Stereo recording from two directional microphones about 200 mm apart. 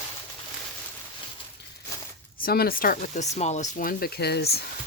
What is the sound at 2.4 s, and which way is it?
Speech, 50° left (ahead or behind).